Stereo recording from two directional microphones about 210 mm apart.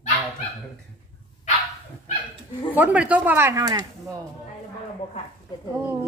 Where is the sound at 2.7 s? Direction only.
5° right (ahead or behind).